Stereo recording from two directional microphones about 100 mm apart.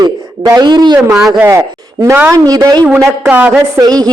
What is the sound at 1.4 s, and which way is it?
A man's voice, 25° right (ahead or behind).